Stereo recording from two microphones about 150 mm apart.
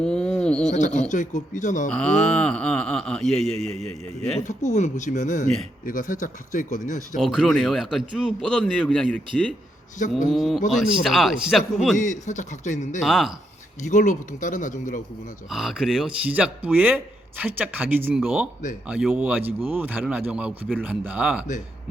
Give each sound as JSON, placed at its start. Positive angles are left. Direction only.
{"t": 0.0, "sound": "a sound", "side_deg": 5}
{"t": 0.7, "sound": "speech", "side_deg": 50}
{"t": 1.9, "sound": "speech", "side_deg": 5}
{"t": 4.4, "sound": "speech", "side_deg": 55}
{"t": 7.2, "sound": "speech", "side_deg": 0}
{"t": 11.9, "sound": "speech", "side_deg": 55}
{"t": 13.0, "sound": "speech", "side_deg": 0}
{"t": 13.9, "sound": "speech", "side_deg": 55}
{"t": 15.4, "sound": "speech", "side_deg": -5}